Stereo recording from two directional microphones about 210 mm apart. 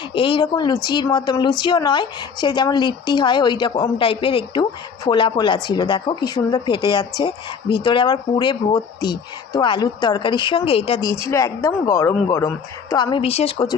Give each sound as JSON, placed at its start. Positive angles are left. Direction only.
{"t": 0.1, "sound": "speech", "side_deg": 25}
{"t": 11.3, "sound": "a woman's voice", "side_deg": 15}